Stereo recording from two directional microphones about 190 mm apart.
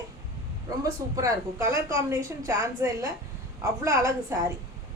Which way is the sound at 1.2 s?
15° right (ahead or behind).